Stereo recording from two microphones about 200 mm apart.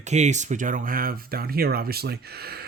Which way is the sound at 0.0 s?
35° right (ahead or behind).